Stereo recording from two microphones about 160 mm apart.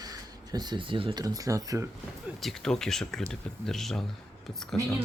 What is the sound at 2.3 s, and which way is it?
Speech, centre (ahead or behind).